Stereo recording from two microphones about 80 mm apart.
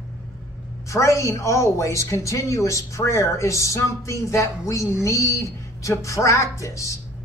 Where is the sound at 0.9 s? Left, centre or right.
Left.